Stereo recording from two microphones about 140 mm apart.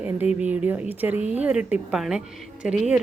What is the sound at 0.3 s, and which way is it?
A woman's voice, 10° right (ahead or behind).